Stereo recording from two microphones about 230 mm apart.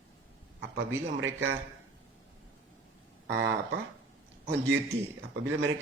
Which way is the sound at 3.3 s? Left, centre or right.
Right.